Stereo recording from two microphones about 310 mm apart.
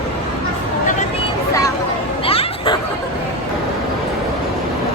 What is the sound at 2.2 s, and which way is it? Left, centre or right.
Music, centre.